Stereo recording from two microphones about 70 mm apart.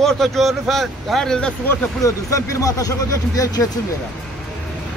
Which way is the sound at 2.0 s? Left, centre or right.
Left.